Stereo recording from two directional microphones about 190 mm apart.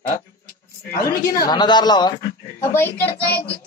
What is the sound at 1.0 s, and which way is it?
A woman's voice, 15° left (ahead or behind).